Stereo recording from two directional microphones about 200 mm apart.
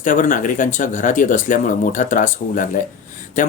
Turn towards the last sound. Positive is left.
turn(degrees=40)  # may be behind; listen again after turning